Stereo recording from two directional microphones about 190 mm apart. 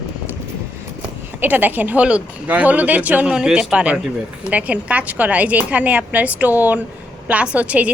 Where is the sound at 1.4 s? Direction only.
10° right (ahead or behind).